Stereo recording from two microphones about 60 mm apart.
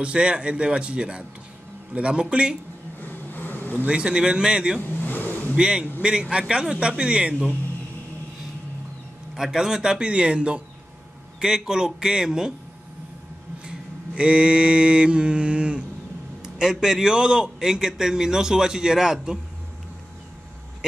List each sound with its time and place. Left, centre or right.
0.0 s a man's voice: centre
3.0 s vehicle: left
3.8 s a man's voice: centre
4.7 s vehicle: left
5.6 s a man's voice: centre
9.3 s a man's voice: centre
13.7 s mantra: centre
16.4 s a man's voice: centre